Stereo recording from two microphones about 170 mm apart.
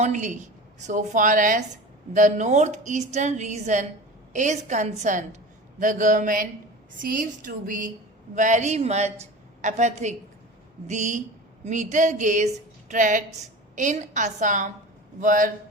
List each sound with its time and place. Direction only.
0.0 s a woman's voice: 45° right (ahead or behind)